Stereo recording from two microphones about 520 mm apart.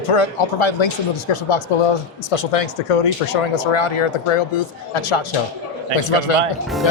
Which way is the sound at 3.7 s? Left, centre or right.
Left.